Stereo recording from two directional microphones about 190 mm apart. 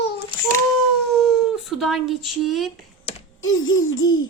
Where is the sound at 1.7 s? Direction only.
Centre (ahead or behind).